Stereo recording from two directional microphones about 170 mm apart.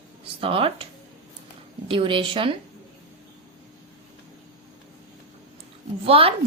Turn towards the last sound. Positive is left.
turn(degrees=-35)  # may be behind; listen again after turning